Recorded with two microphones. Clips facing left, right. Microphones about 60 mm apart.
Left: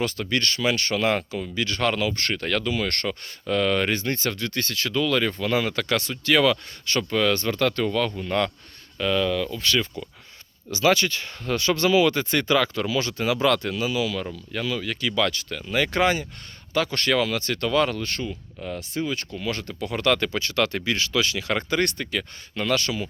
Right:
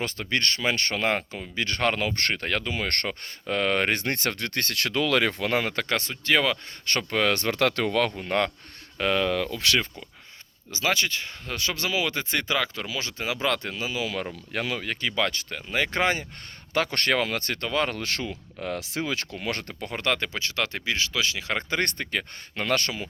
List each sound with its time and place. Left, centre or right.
0.0 s speech: right
2.3 s speech: right
3.9 s speech: right
6.8 s speech: right
7.3 s speech: right
8.1 s speech: right
9.5 s speech: right
10.7 s speech: centre
14.3 s speech: right
16.7 s speech: right
18.0 s speech: right
19.4 s speech: right
20.1 s speech: centre; by 23.0 s right